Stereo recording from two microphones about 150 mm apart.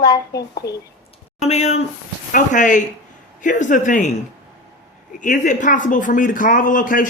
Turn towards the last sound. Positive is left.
turn(degrees=65)  # may be behind; listen again after turning